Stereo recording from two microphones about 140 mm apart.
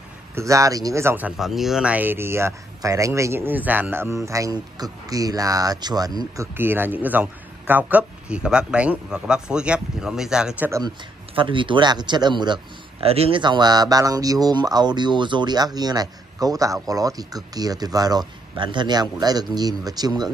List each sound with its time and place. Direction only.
0.4 s speech: 25° right (ahead or behind); by 10.7 s 5° right (ahead or behind)
11.3 s speech: 35° right (ahead or behind)
13.0 s speech: 45° right (ahead or behind); by 20.2 s 30° right (ahead or behind)